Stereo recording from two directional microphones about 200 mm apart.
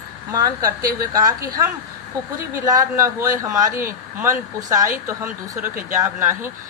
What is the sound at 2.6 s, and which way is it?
Speech, 15° right (ahead or behind).